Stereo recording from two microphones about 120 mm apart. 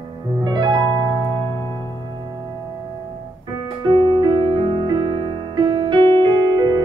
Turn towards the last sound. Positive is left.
turn(degrees=-35)  # may be behind; listen again after turning